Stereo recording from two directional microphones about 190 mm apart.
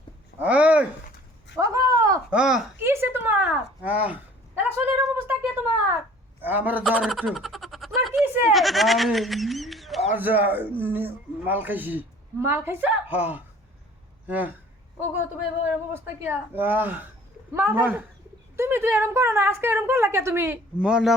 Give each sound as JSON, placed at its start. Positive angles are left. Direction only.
{"t": 0.4, "sound": "a woman's voice", "side_deg": -5}
{"t": 1.5, "sound": "a sound", "side_deg": -15}
{"t": 2.3, "sound": "speech", "side_deg": -5}
{"t": 6.4, "sound": "a woman's voice", "side_deg": -10}
{"t": 6.8, "sound": "a woman's voice", "side_deg": 5}
{"t": 15.9, "sound": "a woman's voice", "side_deg": -10}